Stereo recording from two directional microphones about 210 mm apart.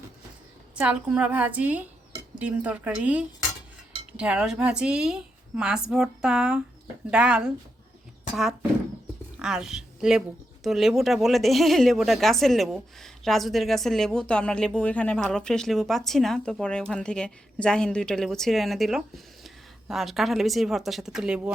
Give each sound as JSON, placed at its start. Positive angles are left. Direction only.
{"t": 0.8, "sound": "a woman's voice", "side_deg": -5}
{"t": 9.4, "sound": "a woman's voice", "side_deg": -5}